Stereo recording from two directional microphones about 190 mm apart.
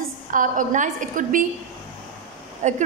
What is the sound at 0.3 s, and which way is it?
A woman's voice, 45° right (ahead or behind).